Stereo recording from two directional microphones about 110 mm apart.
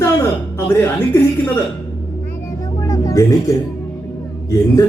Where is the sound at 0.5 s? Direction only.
20° left (ahead or behind).